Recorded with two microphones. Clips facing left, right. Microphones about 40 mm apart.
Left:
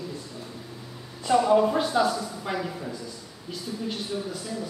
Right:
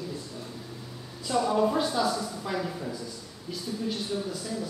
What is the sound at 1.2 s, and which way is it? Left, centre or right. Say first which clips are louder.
Speech: left 6 dB; left.